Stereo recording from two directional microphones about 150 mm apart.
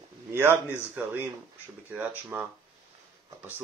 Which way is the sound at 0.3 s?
15° right (ahead or behind).